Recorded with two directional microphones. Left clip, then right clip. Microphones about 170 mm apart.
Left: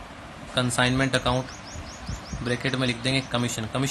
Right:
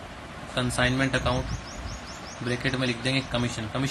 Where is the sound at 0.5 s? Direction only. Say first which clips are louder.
Left 2 dB; 25° left (ahead or behind).